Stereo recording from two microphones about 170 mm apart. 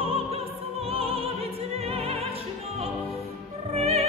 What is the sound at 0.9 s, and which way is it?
Music, 35° right (ahead or behind).